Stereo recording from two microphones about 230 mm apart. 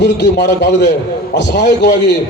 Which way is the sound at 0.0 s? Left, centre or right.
Left.